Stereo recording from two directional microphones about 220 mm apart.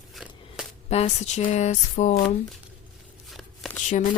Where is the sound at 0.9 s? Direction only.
30° left (ahead or behind).